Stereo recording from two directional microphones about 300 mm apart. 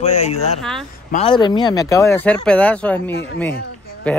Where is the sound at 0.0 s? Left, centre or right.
Left.